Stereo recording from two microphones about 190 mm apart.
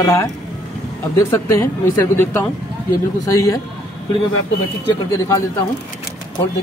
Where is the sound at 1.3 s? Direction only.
15° left (ahead or behind).